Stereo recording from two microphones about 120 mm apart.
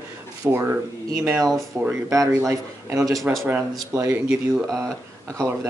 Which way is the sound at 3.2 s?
Centre (ahead or behind).